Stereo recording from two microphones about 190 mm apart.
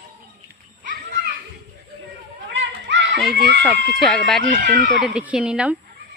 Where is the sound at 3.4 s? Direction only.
60° right (ahead or behind).